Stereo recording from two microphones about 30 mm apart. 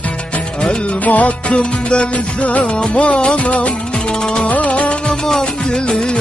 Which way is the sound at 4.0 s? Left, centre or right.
Left.